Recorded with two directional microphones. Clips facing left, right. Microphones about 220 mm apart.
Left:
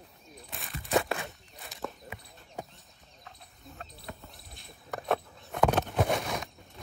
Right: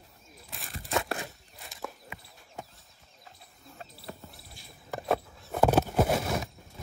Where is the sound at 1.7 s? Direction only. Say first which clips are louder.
Left 2 dB; centre (ahead or behind).